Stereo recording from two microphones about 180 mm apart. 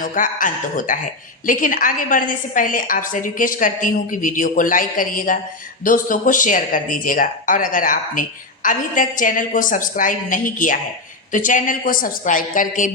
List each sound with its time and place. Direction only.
0.0 s speech: 50° left (ahead or behind)